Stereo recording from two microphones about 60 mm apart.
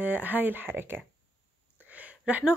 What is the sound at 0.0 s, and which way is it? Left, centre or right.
A woman's voice, right.